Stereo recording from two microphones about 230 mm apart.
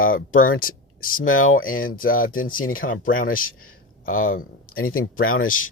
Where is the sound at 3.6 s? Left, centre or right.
Left.